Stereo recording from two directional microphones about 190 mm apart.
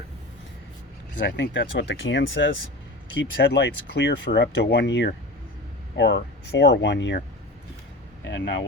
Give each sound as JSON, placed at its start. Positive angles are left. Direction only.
{"t": 1.2, "sound": "speech", "side_deg": 65}
{"t": 3.2, "sound": "speech", "side_deg": 65}
{"t": 8.3, "sound": "speech", "side_deg": 65}